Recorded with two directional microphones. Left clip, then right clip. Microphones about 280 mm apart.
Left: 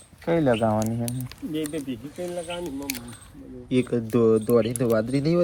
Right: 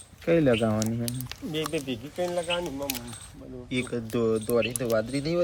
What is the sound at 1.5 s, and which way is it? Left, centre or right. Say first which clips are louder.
Speech: even; right.